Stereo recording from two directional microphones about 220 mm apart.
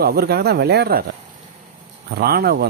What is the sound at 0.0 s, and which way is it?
Speech, 45° right (ahead or behind).